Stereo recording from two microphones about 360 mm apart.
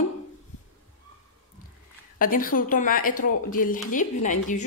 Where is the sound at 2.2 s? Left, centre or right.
Left.